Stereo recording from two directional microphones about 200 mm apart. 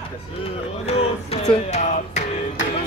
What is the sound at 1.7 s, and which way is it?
Music, 35° left (ahead or behind).